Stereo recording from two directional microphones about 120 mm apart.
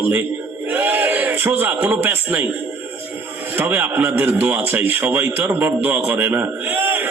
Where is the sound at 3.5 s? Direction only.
15° right (ahead or behind).